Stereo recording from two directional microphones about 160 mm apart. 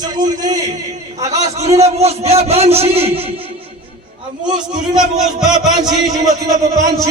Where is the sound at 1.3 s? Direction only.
45° right (ahead or behind).